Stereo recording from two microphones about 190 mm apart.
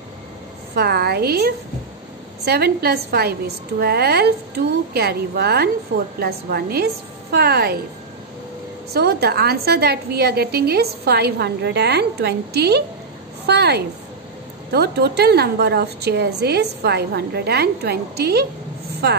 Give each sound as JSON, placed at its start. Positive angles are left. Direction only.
{"t": 0.7, "sound": "a woman's voice", "side_deg": -55}
{"t": 8.9, "sound": "a woman's voice", "side_deg": -55}